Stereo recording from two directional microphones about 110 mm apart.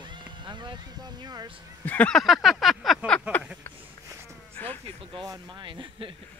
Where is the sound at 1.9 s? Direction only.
15° left (ahead or behind).